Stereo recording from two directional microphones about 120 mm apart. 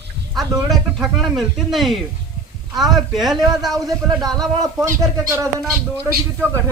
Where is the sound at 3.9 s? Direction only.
30° right (ahead or behind).